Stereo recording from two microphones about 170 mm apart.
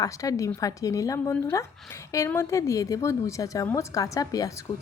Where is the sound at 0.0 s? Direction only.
20° left (ahead or behind).